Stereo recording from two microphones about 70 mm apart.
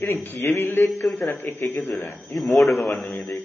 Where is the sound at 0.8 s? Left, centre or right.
Centre.